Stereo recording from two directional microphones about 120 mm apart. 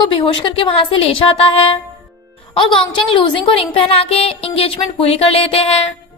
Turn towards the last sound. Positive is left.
turn(degrees=55)  # may be behind; listen again after turning